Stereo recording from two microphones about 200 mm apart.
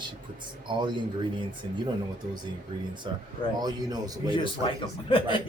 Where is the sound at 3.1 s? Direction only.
25° right (ahead or behind).